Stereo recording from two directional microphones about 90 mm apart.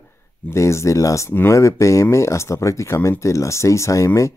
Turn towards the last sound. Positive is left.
turn(degrees=35)  # may be behind; listen again after turning